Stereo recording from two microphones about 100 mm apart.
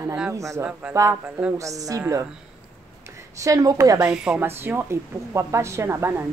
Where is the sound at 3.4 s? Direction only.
35° right (ahead or behind).